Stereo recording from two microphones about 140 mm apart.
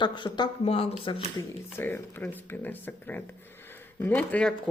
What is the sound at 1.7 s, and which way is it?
Speech, 15° left (ahead or behind).